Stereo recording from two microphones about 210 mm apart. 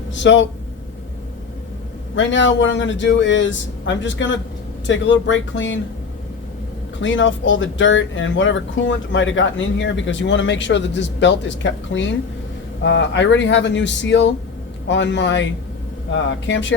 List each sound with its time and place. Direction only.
0.1 s speech: 60° left (ahead or behind)
2.1 s speech: 60° left (ahead or behind)
7.0 s speech: 60° left (ahead or behind)